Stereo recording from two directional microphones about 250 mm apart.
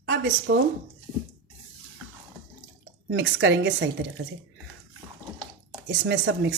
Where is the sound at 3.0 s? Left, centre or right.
Right.